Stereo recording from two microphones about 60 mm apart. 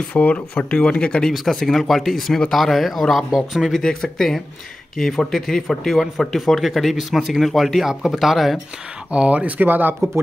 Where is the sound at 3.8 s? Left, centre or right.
Centre.